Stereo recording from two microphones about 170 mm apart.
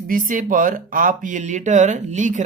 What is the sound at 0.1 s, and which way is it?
Speech, 50° right (ahead or behind).